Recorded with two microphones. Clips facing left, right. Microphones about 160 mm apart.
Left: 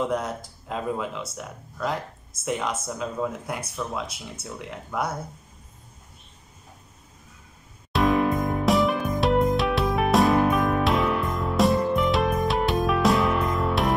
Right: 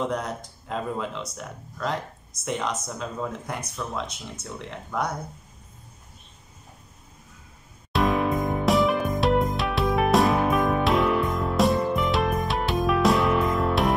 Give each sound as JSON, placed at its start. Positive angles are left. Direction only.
{"t": 0.1, "sound": "speech", "side_deg": 5}
{"t": 7.9, "sound": "music", "side_deg": 0}